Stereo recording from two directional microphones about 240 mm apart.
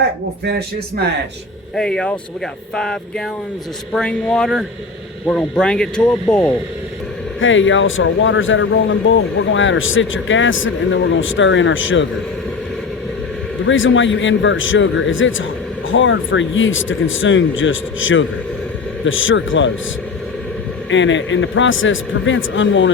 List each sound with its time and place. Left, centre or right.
1.7 s speech: centre
7.3 s a man's voice: left
13.7 s a man's voice: left
20.9 s a man's voice: left